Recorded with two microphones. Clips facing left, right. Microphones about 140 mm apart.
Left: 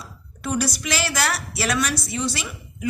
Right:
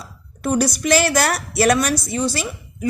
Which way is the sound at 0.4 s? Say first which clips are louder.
Right 6 dB; 45° right (ahead or behind).